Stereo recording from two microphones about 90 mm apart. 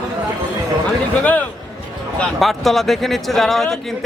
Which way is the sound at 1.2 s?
20° left (ahead or behind).